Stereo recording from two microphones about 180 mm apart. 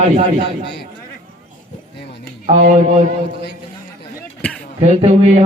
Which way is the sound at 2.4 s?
35° right (ahead or behind).